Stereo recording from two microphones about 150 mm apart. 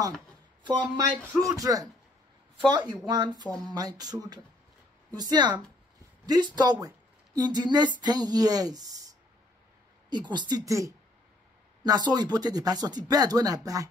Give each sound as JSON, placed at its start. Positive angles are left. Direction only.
{"t": 0.7, "sound": "speech", "side_deg": -30}
{"t": 3.4, "sound": "speech", "side_deg": 5}
{"t": 3.7, "sound": "speech", "side_deg": -25}
{"t": 10.0, "sound": "speech", "side_deg": -30}